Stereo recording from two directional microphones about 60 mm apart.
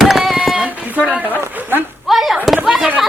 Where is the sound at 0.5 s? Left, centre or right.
Centre.